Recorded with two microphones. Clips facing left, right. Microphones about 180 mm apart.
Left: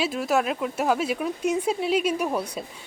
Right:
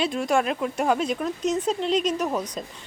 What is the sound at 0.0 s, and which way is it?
A woman's voice, 5° left (ahead or behind).